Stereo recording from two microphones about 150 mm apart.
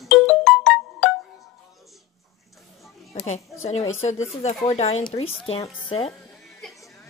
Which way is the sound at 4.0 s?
50° left (ahead or behind).